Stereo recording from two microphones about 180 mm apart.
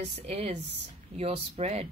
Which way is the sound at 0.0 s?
35° right (ahead or behind).